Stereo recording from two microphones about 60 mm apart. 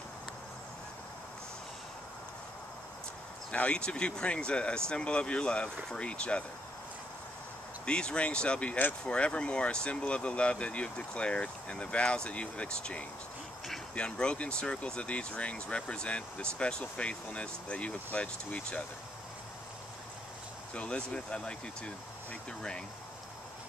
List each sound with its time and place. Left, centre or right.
3.5 s speech: centre
7.8 s speech: centre
20.7 s speech: centre